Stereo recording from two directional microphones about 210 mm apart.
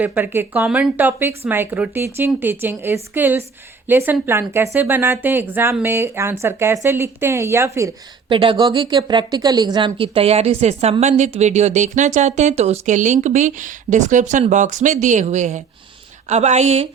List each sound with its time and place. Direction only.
0.0 s speech: 10° right (ahead or behind)
8.3 s a woman's voice: 25° right (ahead or behind)